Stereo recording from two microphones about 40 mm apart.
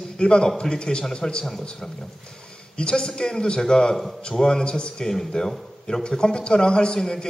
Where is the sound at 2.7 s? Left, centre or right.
Left.